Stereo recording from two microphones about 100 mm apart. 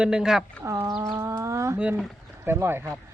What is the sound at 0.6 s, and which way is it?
A woman's voice, 30° right (ahead or behind).